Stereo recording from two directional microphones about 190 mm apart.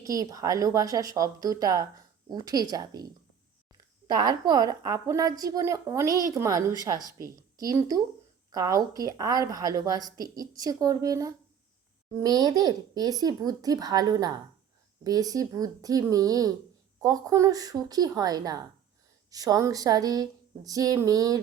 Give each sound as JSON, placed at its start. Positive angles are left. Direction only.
{"t": 0.0, "sound": "a woman's voice", "side_deg": -20}